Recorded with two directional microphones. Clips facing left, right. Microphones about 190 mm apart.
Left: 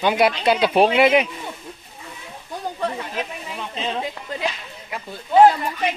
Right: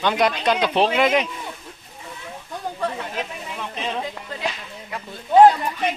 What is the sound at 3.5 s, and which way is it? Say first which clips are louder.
Speech: left 1 dB; centre (ahead or behind).